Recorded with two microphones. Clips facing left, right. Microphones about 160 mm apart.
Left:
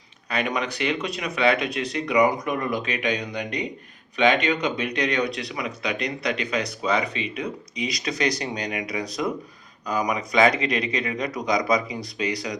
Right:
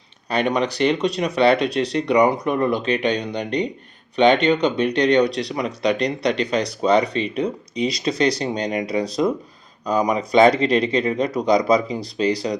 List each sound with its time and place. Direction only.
0.3 s speech: 35° right (ahead or behind)